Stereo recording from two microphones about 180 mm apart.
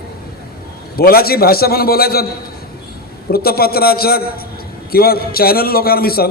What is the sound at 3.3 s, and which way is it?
A man's voice, 60° left (ahead or behind).